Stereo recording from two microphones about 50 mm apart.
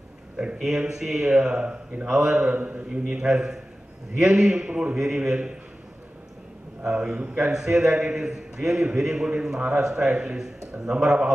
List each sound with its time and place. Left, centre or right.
0.4 s a man's voice: centre
2.9 s a man's voice: centre
4.9 s a man's voice: centre
6.9 s a man's voice: right